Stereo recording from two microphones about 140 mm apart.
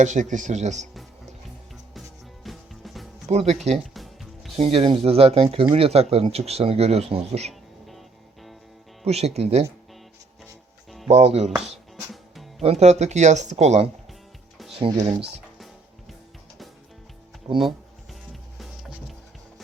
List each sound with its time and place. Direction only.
0.0 s speech: 60° right (ahead or behind)
1.9 s music: centre (ahead or behind)
3.2 s speech: 50° right (ahead or behind)
3.9 s music: centre (ahead or behind)
4.5 s speech: 45° right (ahead or behind)
9.0 s speech: 50° right (ahead or behind)
11.1 s speech: 50° right (ahead or behind)
11.5 s music: centre (ahead or behind)
12.6 s speech: 50° right (ahead or behind)
14.7 s speech: 35° right (ahead or behind)
15.5 s music: centre (ahead or behind)
17.6 s a sound: centre (ahead or behind)
18.6 s music: centre (ahead or behind)